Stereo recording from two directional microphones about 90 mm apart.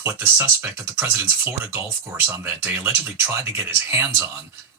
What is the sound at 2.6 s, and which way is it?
Speech, 25° right (ahead or behind).